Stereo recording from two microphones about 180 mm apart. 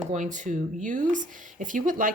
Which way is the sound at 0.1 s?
45° right (ahead or behind).